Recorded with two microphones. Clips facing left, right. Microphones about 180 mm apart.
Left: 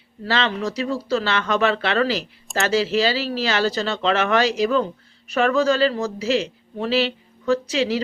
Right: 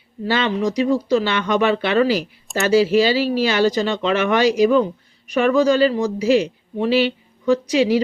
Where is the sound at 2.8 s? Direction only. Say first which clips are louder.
Right 5 dB; 10° right (ahead or behind).